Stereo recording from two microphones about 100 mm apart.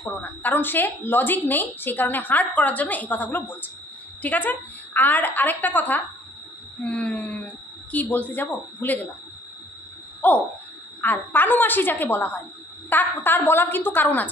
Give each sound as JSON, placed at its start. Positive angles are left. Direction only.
{"t": 0.2, "sound": "a woman's voice", "side_deg": 15}
{"t": 10.2, "sound": "a woman's voice", "side_deg": 15}